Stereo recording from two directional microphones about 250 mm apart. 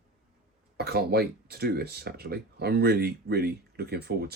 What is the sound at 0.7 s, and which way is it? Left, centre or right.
Speech, right.